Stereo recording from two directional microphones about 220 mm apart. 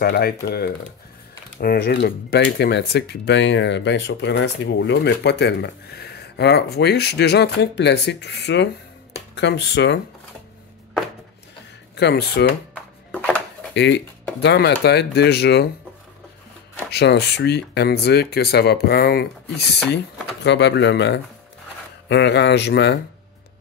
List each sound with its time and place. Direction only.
0.0 s speech: 45° left (ahead or behind)
12.0 s speech: 45° left (ahead or behind)
13.1 s a sound: 5° left (ahead or behind)
13.7 s speech: 50° left (ahead or behind)
16.9 s speech: 50° left (ahead or behind)